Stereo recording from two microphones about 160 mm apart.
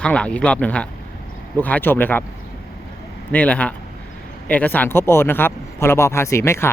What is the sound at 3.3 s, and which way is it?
Speech, 10° left (ahead or behind).